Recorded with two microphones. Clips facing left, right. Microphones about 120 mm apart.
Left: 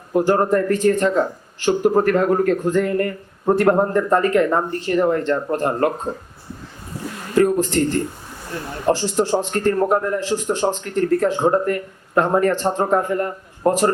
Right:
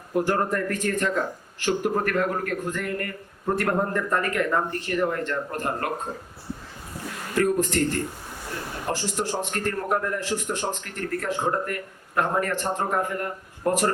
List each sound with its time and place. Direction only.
0.1 s a man's voice: 30° left (ahead or behind)
7.3 s a man's voice: 30° left (ahead or behind)